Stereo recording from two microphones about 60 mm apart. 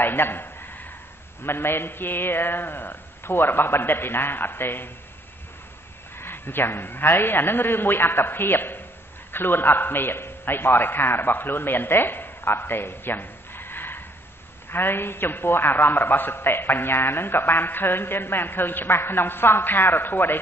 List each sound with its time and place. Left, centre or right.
0.0 s a sound: left
1.4 s a man's voice: left
6.1 s a man's voice: left